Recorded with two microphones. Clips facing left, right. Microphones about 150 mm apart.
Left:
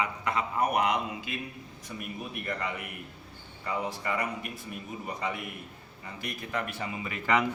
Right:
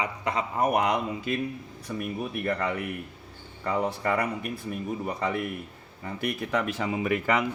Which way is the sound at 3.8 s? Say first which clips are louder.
Right 6 dB; 55° right (ahead or behind).